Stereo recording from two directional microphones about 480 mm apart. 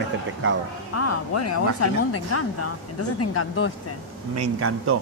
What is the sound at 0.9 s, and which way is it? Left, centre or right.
Speech, left.